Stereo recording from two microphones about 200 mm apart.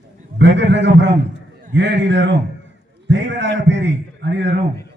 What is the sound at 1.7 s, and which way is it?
A man's voice, 60° right (ahead or behind).